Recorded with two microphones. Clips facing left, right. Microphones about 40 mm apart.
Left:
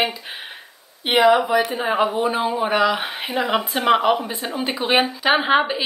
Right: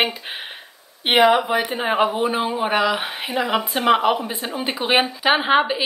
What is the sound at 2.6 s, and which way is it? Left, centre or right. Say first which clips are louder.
Speech: left 1 dB; centre.